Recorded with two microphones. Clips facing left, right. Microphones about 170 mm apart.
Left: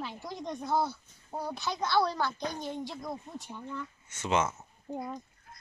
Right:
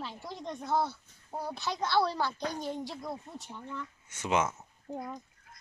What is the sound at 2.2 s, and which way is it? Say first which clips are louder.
Speech: even; 35° right (ahead or behind).